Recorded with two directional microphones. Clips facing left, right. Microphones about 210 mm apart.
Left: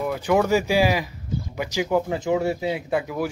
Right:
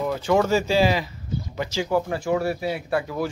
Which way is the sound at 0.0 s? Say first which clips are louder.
Even; 10° left (ahead or behind).